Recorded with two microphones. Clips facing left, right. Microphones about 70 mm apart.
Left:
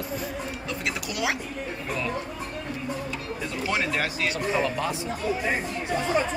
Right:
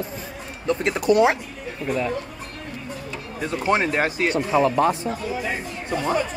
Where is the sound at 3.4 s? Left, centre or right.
Right.